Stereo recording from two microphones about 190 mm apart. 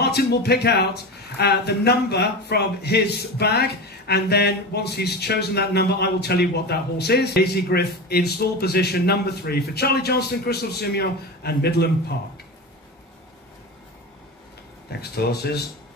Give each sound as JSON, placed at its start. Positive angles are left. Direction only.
{"t": 0.0, "sound": "speech", "side_deg": 60}
{"t": 14.9, "sound": "speech", "side_deg": 55}